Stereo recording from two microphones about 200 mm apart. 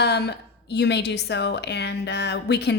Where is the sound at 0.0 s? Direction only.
55° left (ahead or behind).